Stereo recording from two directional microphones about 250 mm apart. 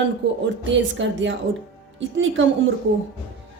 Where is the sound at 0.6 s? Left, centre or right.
Right.